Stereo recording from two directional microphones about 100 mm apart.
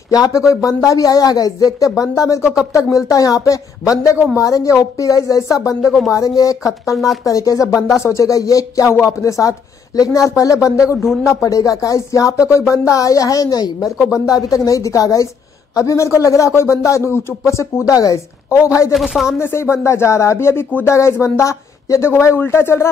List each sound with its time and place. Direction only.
0.1 s speech: 40° left (ahead or behind)
5.9 s speech: 5° right (ahead or behind)
6.1 s speech: 35° left (ahead or behind)
7.6 s speech: 5° right (ahead or behind)
8.0 s speech: 30° left (ahead or behind)
18.9 s speech: centre (ahead or behind)
19.4 s speech: 25° left (ahead or behind)